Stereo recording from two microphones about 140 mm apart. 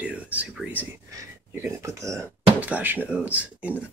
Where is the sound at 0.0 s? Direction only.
10° right (ahead or behind).